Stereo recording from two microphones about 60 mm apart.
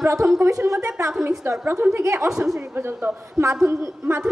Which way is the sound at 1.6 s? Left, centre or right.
Right.